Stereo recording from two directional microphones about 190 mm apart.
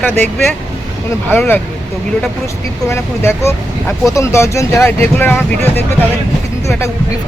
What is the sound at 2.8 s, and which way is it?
Speech, 15° left (ahead or behind).